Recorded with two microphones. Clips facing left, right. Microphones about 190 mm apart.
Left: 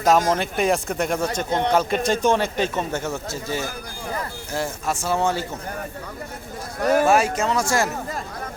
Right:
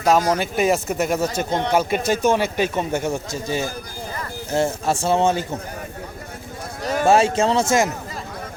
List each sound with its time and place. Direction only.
0.0 s a man's voice: centre (ahead or behind)
4.5 s a man's voice: 25° right (ahead or behind)
6.7 s a sound: 60° left (ahead or behind)
7.0 s a man's voice: 25° right (ahead or behind)